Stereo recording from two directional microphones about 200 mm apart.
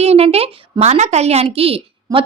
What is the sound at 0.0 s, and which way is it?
A woman's voice, 30° right (ahead or behind).